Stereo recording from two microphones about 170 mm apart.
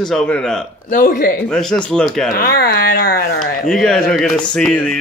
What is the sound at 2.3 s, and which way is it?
Speech, 65° left (ahead or behind).